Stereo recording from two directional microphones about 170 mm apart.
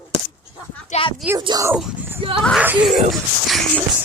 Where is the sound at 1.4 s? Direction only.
20° right (ahead or behind).